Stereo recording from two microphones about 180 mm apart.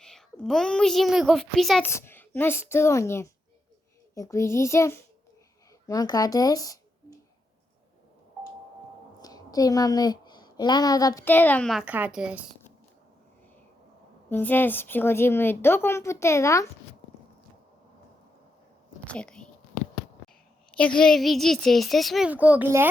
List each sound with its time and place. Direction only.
0.0 s a child's voice: 5° left (ahead or behind)
1.8 s a woman's voice: 15° left (ahead or behind)
9.2 s a woman's voice: 20° left (ahead or behind); by 12.5 s 5° right (ahead or behind)
14.3 s a woman's voice: 10° left (ahead or behind)
19.0 s whispering: 5° left (ahead or behind)
20.2 s a woman's voice: 5° left (ahead or behind); by 22.9 s 10° right (ahead or behind)